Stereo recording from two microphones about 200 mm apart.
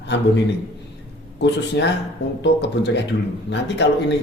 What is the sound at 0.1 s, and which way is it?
Speech, 60° left (ahead or behind).